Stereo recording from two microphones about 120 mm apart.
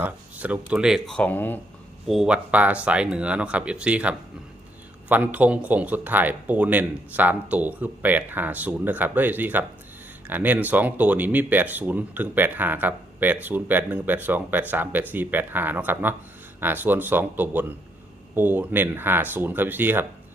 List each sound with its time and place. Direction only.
0.0 s speech: 10° right (ahead or behind); by 1.5 s 15° left (ahead or behind)
2.0 s speech: 5° right (ahead or behind)